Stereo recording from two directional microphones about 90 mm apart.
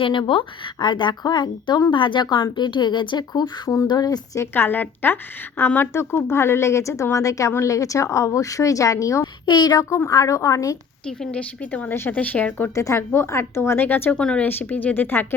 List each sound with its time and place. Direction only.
0.0 s speech: 65° left (ahead or behind); by 4.4 s 45° left (ahead or behind)
4.5 s a woman's voice: 20° left (ahead or behind)
9.2 s speech: 50° left (ahead or behind)
9.9 s speech: 40° left (ahead or behind)
11.0 s a woman's voice: 10° left (ahead or behind)
12.7 s a woman's voice: 35° left (ahead or behind)
14.2 s a woman's voice: 10° left (ahead or behind)